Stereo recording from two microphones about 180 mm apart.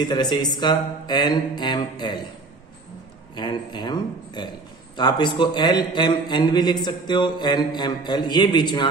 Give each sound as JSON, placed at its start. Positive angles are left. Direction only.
{"t": 0.0, "sound": "a man's voice", "side_deg": 25}
{"t": 3.3, "sound": "a man's voice", "side_deg": 25}